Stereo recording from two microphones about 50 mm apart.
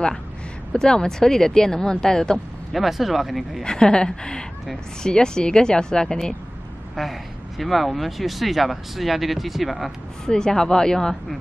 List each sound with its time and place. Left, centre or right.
0.7 s speech: centre
2.7 s speech: centre
3.6 s speech: centre
7.0 s speech: centre
10.2 s speech: centre